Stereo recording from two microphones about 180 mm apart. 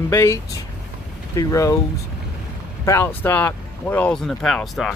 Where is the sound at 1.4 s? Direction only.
20° left (ahead or behind).